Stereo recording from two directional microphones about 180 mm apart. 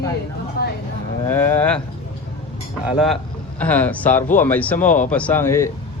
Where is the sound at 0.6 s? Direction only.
60° left (ahead or behind).